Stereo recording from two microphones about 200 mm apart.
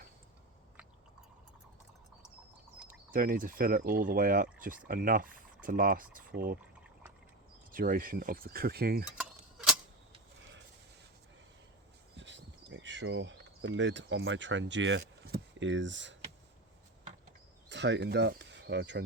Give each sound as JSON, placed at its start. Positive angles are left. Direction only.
{"t": 2.8, "sound": "speech", "side_deg": -45}
{"t": 7.7, "sound": "speech", "side_deg": -45}
{"t": 9.1, "sound": "tick-tock", "side_deg": -5}
{"t": 12.1, "sound": "cricket", "side_deg": -65}
{"t": 17.7, "sound": "speech", "side_deg": -60}